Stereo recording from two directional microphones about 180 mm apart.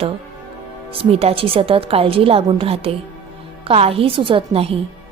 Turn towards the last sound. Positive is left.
turn(degrees=-30)  # may be behind; listen again after turning